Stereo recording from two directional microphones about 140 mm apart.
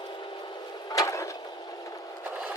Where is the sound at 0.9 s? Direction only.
20° left (ahead or behind).